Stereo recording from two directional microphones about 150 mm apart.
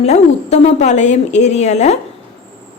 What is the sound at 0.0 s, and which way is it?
A woman's voice, 45° left (ahead or behind).